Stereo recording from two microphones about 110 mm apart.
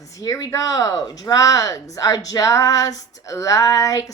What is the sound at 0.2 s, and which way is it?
A woman's voice, 30° left (ahead or behind).